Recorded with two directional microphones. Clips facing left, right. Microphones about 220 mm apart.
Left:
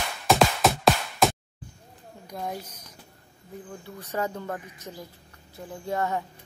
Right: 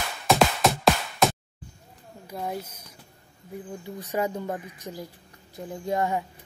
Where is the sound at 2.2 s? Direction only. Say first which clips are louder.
Right 2 dB; 5° right (ahead or behind).